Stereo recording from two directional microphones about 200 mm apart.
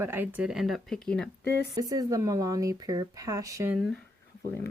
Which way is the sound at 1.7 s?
20° right (ahead or behind).